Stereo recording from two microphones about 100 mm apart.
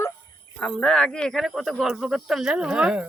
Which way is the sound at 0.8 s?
10° left (ahead or behind).